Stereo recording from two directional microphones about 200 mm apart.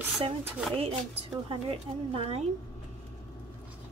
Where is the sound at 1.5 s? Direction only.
30° right (ahead or behind).